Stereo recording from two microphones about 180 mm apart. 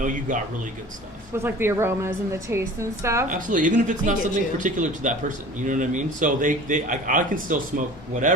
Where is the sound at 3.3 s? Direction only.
45° right (ahead or behind).